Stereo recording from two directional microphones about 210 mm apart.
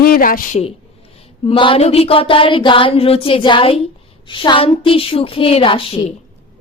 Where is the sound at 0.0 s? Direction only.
45° left (ahead or behind).